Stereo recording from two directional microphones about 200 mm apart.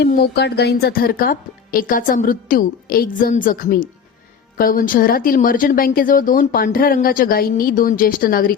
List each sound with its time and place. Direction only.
0.0 s speech: 50° left (ahead or behind)